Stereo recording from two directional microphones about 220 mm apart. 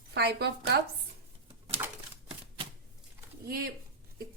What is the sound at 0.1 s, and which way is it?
Speech, 45° right (ahead or behind).